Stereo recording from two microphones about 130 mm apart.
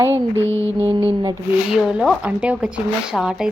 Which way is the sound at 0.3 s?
20° left (ahead or behind).